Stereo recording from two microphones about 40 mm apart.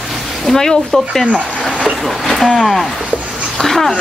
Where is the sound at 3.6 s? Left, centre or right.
Centre.